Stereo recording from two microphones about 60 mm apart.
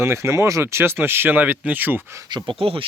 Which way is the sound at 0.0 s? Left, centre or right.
Right.